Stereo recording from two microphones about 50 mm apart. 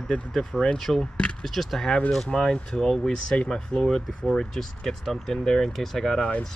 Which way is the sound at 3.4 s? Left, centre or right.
Centre.